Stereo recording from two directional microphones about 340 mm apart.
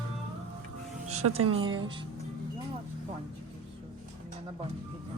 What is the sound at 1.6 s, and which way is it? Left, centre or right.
Speech, centre.